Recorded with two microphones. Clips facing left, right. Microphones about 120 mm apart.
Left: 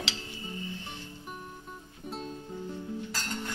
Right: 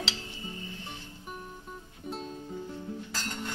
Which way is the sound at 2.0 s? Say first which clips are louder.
Even; centre (ahead or behind).